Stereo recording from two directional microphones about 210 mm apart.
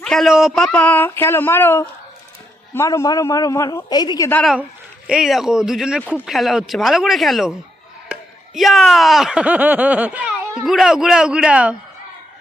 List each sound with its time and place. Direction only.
0.0 s speech: centre (ahead or behind); by 4.3 s 20° left (ahead or behind)
4.3 s speech: 5° left (ahead or behind)
5.0 s speech: 5° right (ahead or behind)